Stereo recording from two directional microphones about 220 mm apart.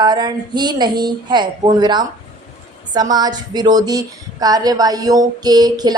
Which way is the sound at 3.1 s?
20° right (ahead or behind).